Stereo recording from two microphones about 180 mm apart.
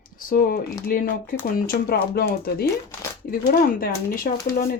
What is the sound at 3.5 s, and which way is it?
Speech, 55° left (ahead or behind).